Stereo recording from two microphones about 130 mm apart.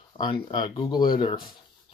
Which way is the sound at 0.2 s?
35° left (ahead or behind).